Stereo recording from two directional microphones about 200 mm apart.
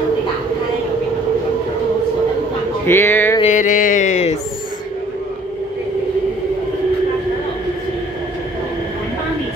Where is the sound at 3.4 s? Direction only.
35° left (ahead or behind).